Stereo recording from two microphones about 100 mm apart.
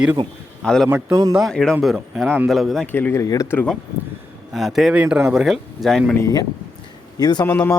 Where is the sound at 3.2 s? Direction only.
35° left (ahead or behind).